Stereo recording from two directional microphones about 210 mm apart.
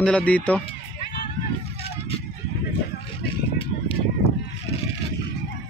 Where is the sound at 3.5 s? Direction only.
25° left (ahead or behind).